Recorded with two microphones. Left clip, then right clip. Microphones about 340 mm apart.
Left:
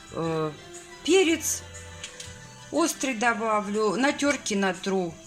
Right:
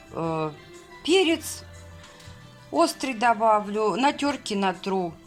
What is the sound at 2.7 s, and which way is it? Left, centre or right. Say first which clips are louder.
Speech: right 3 dB; centre.